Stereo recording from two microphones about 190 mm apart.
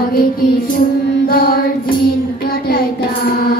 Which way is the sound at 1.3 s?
50° left (ahead or behind).